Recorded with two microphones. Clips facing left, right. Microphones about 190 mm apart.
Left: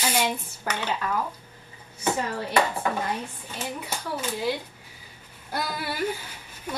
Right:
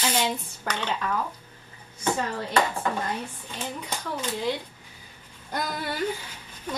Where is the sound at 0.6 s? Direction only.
10° left (ahead or behind).